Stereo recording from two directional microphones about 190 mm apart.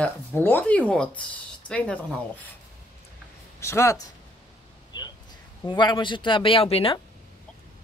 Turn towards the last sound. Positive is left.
turn(degrees=30)  # may be behind; listen again after turning